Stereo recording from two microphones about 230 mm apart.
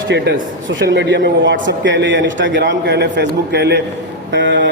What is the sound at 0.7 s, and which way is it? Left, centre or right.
A man's voice, right.